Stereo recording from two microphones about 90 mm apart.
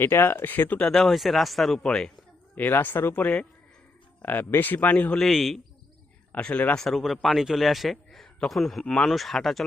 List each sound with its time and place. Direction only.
0.0 s speech: 25° left (ahead or behind); by 2.1 s 10° left (ahead or behind)
2.6 s a man's voice: 20° left (ahead or behind)
5.2 s a man's voice: centre (ahead or behind)
6.3 s speech: 15° left (ahead or behind)
6.7 s a man's voice: centre (ahead or behind)